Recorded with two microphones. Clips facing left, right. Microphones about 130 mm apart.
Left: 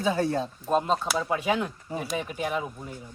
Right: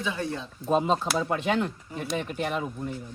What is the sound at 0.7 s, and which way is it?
Speech, centre (ahead or behind).